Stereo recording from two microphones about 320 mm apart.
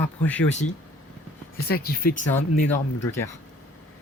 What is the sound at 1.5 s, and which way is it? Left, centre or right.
Speech, left.